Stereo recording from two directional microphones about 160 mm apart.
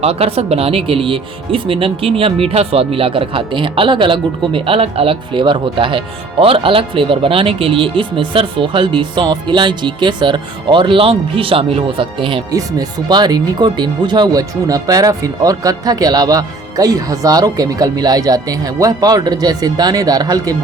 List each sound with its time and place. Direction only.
0.0 s speech: 40° right (ahead or behind)
12.5 s speech: 20° right (ahead or behind)